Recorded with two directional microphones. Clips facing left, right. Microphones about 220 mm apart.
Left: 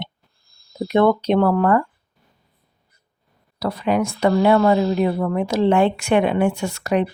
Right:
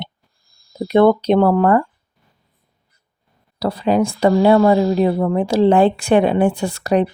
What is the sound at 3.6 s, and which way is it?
Speech, 30° right (ahead or behind).